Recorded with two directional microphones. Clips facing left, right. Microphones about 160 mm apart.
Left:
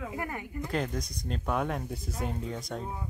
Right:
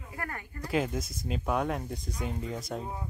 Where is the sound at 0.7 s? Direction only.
5° right (ahead or behind).